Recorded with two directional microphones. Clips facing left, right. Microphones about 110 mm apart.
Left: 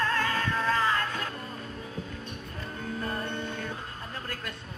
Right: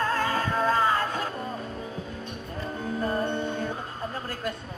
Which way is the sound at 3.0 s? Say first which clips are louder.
Right 8 dB; 20° right (ahead or behind).